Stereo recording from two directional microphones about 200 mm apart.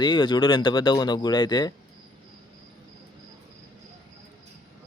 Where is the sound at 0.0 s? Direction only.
25° left (ahead or behind).